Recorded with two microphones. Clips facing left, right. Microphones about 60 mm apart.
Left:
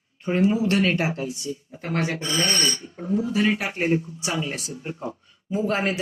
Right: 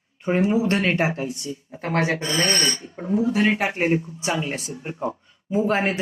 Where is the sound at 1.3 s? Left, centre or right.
Right.